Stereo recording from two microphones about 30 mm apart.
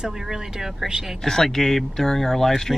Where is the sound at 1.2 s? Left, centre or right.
Centre.